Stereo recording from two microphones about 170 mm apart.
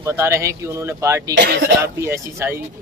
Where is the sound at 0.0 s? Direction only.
15° right (ahead or behind).